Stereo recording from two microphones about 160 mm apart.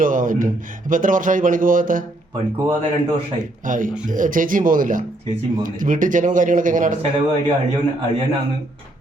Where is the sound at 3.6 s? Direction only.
55° right (ahead or behind).